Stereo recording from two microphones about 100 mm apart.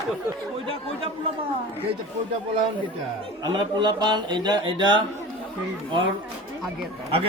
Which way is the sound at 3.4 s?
50° right (ahead or behind).